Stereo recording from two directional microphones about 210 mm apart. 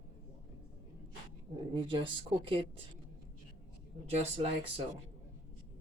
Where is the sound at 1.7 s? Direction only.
25° right (ahead or behind).